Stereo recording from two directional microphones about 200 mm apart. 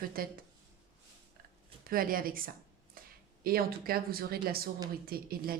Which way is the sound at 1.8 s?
45° right (ahead or behind).